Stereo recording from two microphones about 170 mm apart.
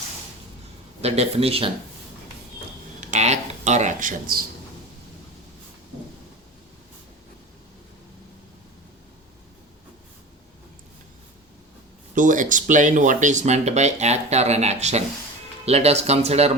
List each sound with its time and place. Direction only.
1.0 s speech: 35° right (ahead or behind)
3.0 s cash register: 45° right (ahead or behind)
12.1 s speech: 50° right (ahead or behind)